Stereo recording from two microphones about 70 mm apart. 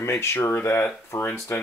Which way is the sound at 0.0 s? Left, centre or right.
Left.